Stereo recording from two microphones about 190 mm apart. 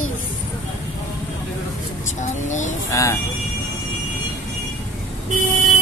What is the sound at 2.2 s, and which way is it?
Speech, 40° left (ahead or behind).